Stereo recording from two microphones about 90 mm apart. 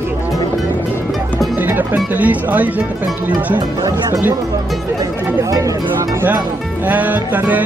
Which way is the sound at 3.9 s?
40° right (ahead or behind).